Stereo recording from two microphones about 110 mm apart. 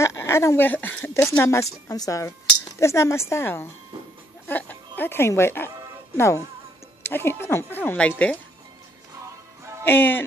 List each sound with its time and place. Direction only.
0.0 s speech: 25° left (ahead or behind)
9.8 s speech: 20° left (ahead or behind)